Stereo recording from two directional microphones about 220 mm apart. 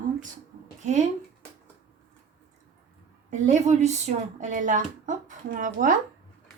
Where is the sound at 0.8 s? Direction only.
30° right (ahead or behind).